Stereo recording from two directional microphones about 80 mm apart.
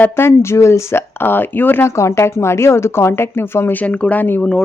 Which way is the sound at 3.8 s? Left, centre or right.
Centre.